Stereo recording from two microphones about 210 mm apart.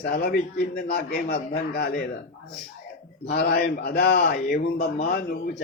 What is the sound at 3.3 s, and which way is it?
A man's voice, 45° left (ahead or behind).